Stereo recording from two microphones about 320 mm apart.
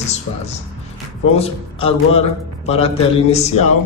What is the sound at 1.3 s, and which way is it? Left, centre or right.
A man's voice, centre.